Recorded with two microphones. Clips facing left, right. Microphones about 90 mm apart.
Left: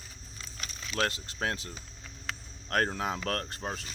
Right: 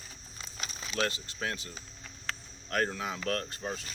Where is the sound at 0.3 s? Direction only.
20° right (ahead or behind).